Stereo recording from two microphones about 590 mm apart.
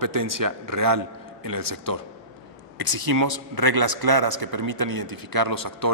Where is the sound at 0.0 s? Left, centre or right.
Right.